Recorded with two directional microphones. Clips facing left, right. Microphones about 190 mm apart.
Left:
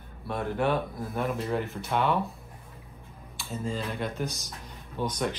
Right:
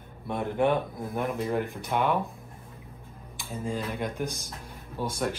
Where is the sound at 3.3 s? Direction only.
15° right (ahead or behind).